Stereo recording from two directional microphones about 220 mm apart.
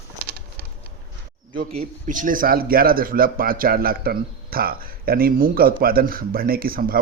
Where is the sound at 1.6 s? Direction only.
35° right (ahead or behind).